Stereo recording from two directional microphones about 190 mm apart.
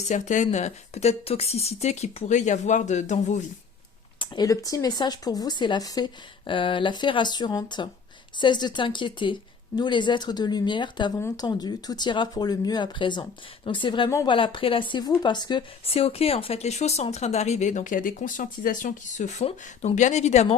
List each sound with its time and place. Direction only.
0.1 s speech: 40° left (ahead or behind)
4.2 s speech: 20° left (ahead or behind); by 20.6 s 35° left (ahead or behind)